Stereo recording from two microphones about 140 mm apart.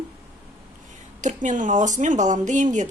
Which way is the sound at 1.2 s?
60° right (ahead or behind).